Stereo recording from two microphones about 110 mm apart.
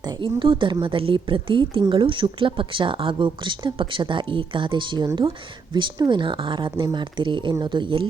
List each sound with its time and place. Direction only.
0.0 s speech: 45° right (ahead or behind)